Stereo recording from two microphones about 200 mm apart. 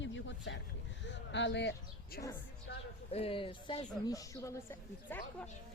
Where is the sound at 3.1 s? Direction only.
30° left (ahead or behind).